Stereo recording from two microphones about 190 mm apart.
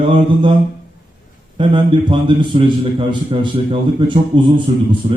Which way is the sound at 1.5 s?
25° right (ahead or behind).